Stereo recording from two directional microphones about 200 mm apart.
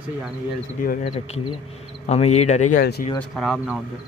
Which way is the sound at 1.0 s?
30° left (ahead or behind).